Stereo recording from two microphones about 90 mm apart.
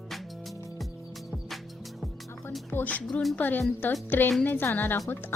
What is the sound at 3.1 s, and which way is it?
Speech, centre (ahead or behind).